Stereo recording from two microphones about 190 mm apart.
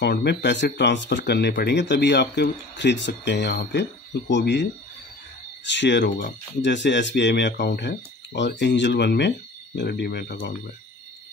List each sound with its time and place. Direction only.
0.0 s speech: 60° left (ahead or behind)
5.7 s speech: 70° left (ahead or behind)
6.0 s speech: 45° left (ahead or behind)
6.6 s speech: 65° left (ahead or behind)